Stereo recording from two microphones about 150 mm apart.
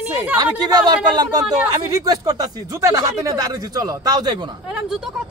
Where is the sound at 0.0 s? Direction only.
10° right (ahead or behind).